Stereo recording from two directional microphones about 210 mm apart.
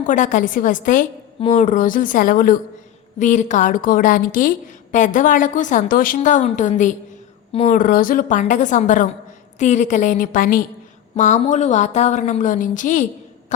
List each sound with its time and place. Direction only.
0.0 s a woman's voice: 35° left (ahead or behind)